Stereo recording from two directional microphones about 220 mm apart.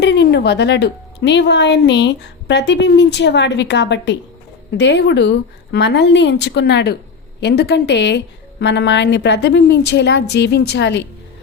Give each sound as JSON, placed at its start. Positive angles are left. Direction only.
{"t": 0.0, "sound": "a woman's voice", "side_deg": 50}